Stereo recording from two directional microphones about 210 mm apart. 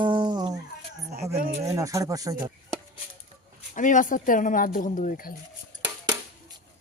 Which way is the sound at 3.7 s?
35° left (ahead or behind).